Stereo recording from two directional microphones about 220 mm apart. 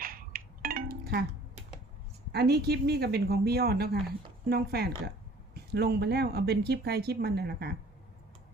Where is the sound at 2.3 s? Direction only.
45° right (ahead or behind).